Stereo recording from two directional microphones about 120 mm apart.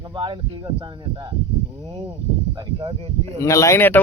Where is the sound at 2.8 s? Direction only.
50° right (ahead or behind).